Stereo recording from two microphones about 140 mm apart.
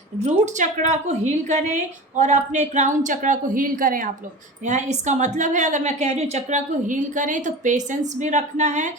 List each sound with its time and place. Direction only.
0.2 s a woman's voice: 55° right (ahead or behind); by 4.1 s 75° right (ahead or behind)
4.6 s a woman's voice: 60° right (ahead or behind)